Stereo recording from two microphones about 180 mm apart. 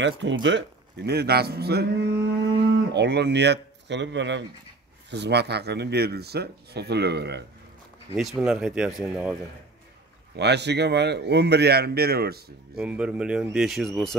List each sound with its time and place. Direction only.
0.0 s speech: 90° right
5.1 s speech: 70° right (ahead or behind)
8.2 s speech: centre (ahead or behind)
10.3 s speech: 70° right (ahead or behind)
12.7 s speech: 5° right (ahead or behind)